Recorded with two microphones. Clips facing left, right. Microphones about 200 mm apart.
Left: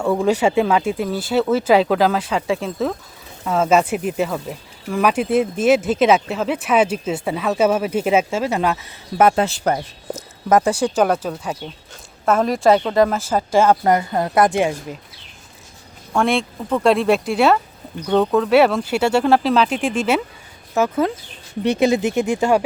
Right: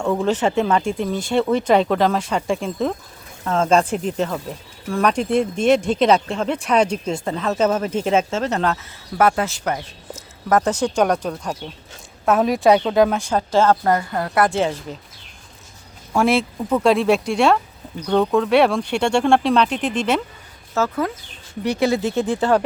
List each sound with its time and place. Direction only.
0.0 s speech: 10° left (ahead or behind)
9.1 s speech: 25° left (ahead or behind)
10.5 s speech: 10° left (ahead or behind)
16.1 s speech: centre (ahead or behind)
20.7 s speech: 20° left (ahead or behind)